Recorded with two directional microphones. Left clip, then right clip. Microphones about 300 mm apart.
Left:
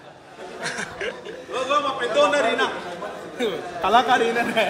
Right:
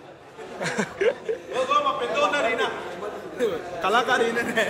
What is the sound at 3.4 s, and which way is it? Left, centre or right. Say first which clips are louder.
Speech: left 1 dB; left.